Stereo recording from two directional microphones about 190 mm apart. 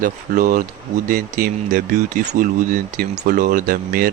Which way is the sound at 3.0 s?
45° right (ahead or behind).